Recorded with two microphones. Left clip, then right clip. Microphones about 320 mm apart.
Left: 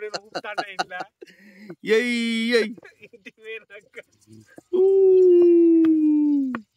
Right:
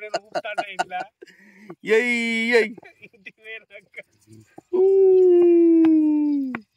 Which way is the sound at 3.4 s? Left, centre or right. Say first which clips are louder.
Left 2 dB; centre.